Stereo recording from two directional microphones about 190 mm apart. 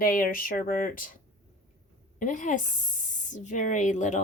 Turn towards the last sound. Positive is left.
turn(degrees=40)  # may be behind; listen again after turning